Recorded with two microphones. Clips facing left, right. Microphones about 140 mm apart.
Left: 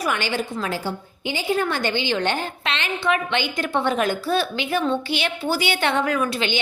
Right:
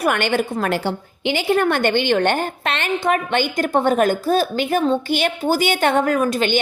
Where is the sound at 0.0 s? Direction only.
55° right (ahead or behind).